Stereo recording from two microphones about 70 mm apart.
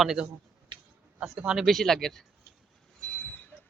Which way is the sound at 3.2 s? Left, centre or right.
Left.